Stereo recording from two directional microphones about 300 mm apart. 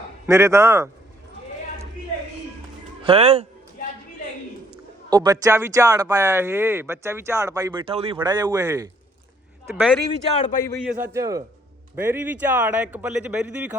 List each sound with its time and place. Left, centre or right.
0.3 s speech: centre
3.1 s speech: right
5.0 s speech: centre
10.3 s a man's voice: left
10.6 s speech: centre